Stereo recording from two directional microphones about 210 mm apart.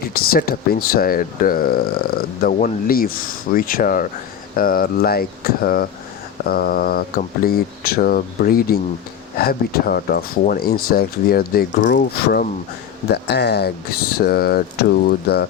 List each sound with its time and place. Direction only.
0.0 s speech: 45° left (ahead or behind)